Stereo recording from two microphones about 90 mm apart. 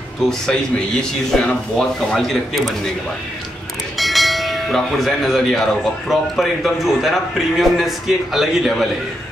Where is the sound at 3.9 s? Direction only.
Centre (ahead or behind).